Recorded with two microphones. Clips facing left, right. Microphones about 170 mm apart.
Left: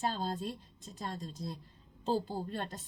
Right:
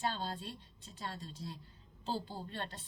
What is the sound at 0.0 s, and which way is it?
A woman's voice, 40° left (ahead or behind).